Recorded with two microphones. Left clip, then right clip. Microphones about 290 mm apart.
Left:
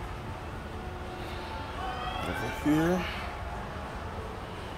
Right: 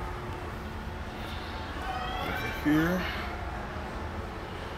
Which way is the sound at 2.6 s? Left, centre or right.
Centre.